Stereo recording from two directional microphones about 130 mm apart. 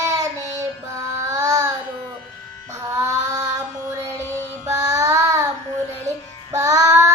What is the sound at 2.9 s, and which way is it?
Child singing, 25° right (ahead or behind).